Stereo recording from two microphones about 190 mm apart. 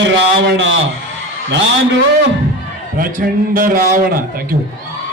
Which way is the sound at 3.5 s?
50° right (ahead or behind).